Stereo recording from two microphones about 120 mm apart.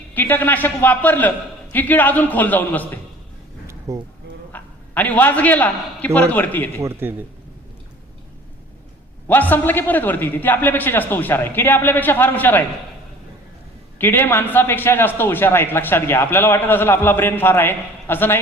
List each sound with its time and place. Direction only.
0.1 s a man's voice: 15° left (ahead or behind)
3.9 s speech: 25° right (ahead or behind)
4.5 s a man's voice: 15° left (ahead or behind)
6.8 s speech: 20° right (ahead or behind)
9.2 s a man's voice: 15° left (ahead or behind)
14.0 s a man's voice: 15° left (ahead or behind)